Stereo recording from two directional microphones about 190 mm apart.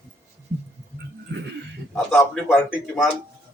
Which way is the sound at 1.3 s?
65° right (ahead or behind).